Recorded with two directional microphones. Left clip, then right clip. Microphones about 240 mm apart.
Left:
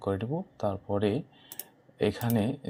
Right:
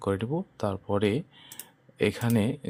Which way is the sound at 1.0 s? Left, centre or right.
Right.